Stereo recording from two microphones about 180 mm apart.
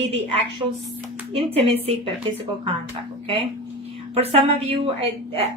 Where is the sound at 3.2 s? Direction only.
30° right (ahead or behind).